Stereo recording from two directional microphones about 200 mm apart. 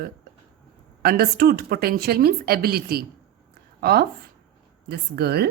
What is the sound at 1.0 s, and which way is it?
A woman's voice, 50° right (ahead or behind).